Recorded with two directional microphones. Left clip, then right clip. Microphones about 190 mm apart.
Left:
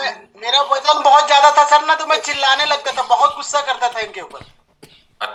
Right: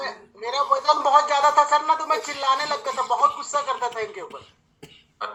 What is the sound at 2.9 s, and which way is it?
Speech, 40° left (ahead or behind).